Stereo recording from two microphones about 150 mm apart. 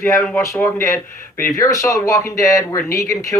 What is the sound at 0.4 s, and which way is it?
Speech, 20° left (ahead or behind).